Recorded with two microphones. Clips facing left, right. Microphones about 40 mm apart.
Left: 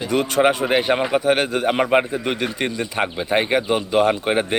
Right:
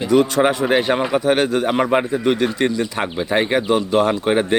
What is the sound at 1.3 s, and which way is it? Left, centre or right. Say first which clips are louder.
A man's voice: right 3 dB; left.